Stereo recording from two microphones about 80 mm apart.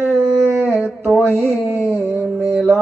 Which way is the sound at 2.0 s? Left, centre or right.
Right.